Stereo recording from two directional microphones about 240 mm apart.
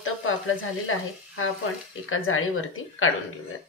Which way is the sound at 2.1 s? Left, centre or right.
Left.